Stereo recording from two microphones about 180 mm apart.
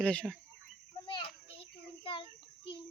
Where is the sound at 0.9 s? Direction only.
30° left (ahead or behind).